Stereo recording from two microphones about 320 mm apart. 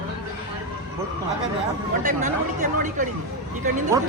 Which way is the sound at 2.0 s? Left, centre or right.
Right.